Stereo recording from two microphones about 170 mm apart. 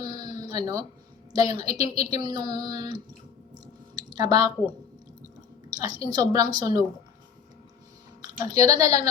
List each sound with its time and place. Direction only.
0.0 s a sound: 20° right (ahead or behind)
1.3 s child singing: 20° right (ahead or behind)
3.9 s a sound: 20° right (ahead or behind)
5.7 s a woman's voice: 20° right (ahead or behind)
6.1 s child singing: 25° right (ahead or behind)
8.2 s speech: 20° right (ahead or behind)